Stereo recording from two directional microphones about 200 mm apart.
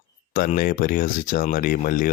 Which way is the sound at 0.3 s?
45° left (ahead or behind).